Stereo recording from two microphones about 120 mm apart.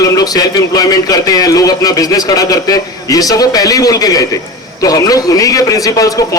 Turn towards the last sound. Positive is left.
turn(degrees=30)  # may be behind; listen again after turning